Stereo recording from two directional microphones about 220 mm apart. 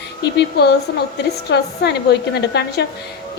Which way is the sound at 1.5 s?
50° left (ahead or behind).